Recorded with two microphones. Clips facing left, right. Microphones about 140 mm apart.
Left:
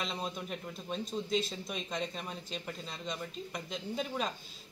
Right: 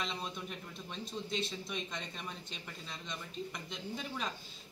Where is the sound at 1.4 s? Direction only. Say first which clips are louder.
Left 1 dB; 35° left (ahead or behind).